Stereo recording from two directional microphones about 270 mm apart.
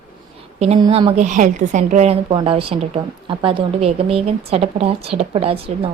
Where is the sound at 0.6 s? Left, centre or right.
Right.